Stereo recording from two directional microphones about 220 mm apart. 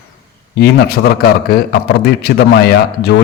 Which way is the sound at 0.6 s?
45° left (ahead or behind).